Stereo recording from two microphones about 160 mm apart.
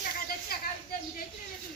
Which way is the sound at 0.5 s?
70° left (ahead or behind).